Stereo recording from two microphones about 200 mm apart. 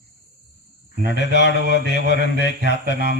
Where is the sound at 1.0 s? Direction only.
60° left (ahead or behind).